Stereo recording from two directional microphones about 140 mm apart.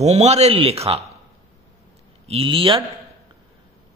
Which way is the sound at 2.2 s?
45° right (ahead or behind).